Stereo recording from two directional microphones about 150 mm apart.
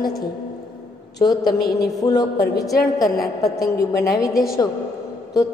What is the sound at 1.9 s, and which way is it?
A woman's voice, 25° left (ahead or behind).